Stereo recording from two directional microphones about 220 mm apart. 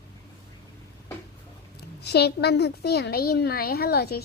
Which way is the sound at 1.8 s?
50° left (ahead or behind).